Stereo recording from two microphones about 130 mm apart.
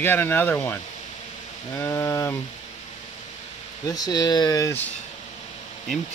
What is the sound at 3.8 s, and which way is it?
Speech, 30° left (ahead or behind).